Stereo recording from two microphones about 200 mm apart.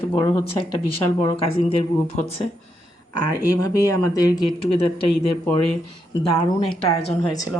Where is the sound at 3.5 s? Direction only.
15° left (ahead or behind).